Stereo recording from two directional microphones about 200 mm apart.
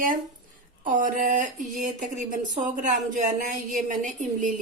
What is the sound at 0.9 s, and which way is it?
A woman's voice, 40° right (ahead or behind).